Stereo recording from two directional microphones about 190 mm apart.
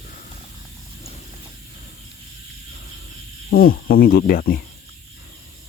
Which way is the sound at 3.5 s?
50° left (ahead or behind).